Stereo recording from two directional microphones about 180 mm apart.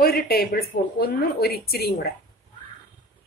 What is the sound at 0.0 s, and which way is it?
A woman's voice, 55° left (ahead or behind).